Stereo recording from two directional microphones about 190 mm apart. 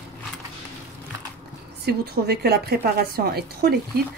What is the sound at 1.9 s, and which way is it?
Speech, 55° right (ahead or behind).